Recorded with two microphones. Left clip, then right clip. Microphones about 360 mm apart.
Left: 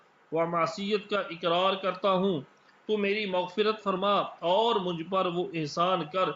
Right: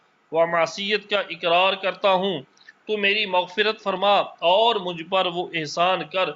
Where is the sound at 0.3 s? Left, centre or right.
Right.